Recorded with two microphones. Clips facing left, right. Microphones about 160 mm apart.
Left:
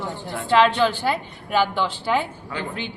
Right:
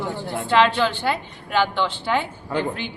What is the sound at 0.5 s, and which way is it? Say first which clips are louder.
A woman's voice: left 1 dB; 5° left (ahead or behind).